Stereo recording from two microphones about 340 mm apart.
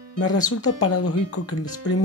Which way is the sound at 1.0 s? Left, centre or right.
Left.